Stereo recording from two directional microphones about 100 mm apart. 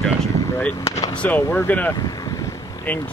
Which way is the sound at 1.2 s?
15° left (ahead or behind).